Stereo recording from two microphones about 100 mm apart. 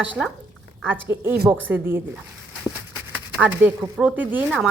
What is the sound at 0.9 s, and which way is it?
A woman's voice, 20° right (ahead or behind).